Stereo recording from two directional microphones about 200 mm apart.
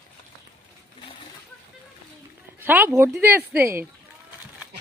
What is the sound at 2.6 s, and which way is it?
Speech, 10° right (ahead or behind).